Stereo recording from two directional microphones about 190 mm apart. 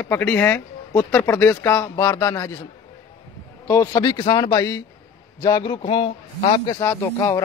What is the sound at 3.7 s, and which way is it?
A man's voice, 20° left (ahead or behind).